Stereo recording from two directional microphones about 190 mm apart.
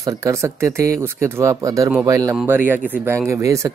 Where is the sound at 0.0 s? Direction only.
15° right (ahead or behind).